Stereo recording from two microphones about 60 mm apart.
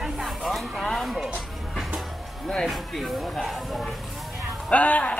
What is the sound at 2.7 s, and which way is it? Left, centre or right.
Speech, centre.